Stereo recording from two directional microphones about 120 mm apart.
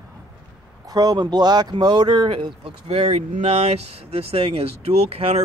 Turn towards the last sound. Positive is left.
turn(degrees=-55)  # may be behind; listen again after turning